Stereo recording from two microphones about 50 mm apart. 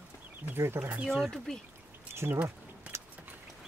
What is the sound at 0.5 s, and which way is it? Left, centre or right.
Speech, right.